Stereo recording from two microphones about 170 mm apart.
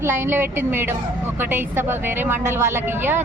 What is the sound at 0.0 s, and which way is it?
A woman's voice, 15° right (ahead or behind).